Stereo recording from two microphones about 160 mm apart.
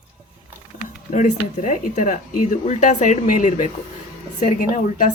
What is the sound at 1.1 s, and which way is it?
Speech, 50° left (ahead or behind).